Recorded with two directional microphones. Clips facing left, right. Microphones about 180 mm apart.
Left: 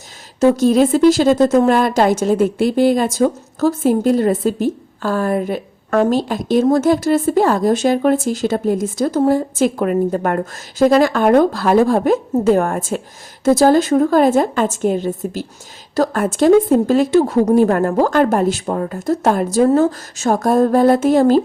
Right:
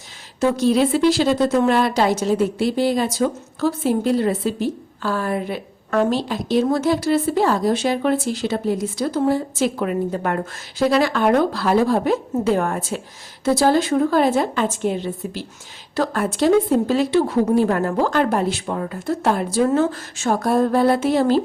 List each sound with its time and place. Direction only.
0.3 s a woman's voice: 40° left (ahead or behind)